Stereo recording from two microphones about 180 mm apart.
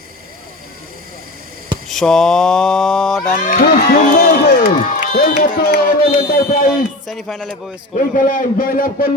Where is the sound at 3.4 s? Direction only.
50° left (ahead or behind).